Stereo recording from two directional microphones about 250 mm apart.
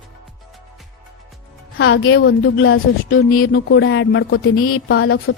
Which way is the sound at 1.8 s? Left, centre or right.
Left.